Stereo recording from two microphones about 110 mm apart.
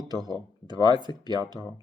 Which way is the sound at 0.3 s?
40° right (ahead or behind).